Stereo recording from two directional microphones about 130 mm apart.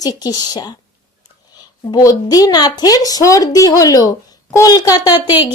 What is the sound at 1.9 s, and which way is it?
Speech, 30° left (ahead or behind).